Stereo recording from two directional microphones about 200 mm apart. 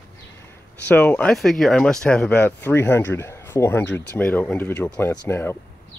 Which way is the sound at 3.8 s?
65° left (ahead or behind).